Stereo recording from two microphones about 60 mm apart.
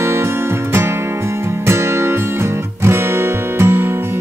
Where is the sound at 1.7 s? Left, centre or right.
Right.